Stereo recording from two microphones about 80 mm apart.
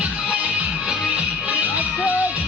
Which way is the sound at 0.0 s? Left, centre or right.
Centre.